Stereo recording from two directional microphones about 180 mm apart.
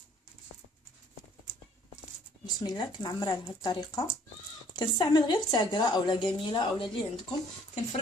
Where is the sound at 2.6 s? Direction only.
25° left (ahead or behind).